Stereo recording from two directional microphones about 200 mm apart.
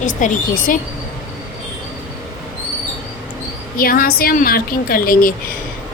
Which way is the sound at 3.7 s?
45° left (ahead or behind).